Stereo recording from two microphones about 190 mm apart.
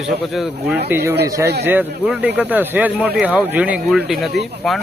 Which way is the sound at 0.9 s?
10° right (ahead or behind).